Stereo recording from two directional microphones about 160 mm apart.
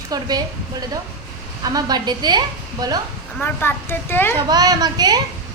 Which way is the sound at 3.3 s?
10° left (ahead or behind).